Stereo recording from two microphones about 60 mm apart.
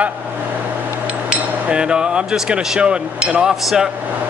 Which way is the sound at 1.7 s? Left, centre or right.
Centre.